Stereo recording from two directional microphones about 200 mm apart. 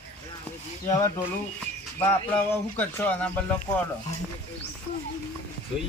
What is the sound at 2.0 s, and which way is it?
A man's voice, 10° left (ahead or behind).